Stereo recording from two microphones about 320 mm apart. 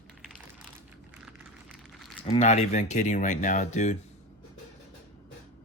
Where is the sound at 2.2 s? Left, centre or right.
Centre.